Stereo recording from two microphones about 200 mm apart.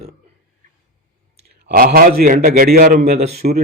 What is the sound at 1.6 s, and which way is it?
A man's voice, 50° right (ahead or behind).